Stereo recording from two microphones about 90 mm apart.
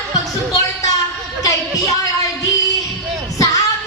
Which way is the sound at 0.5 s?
40° left (ahead or behind).